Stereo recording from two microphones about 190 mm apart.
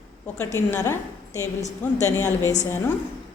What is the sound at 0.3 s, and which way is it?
A woman's voice, 15° left (ahead or behind).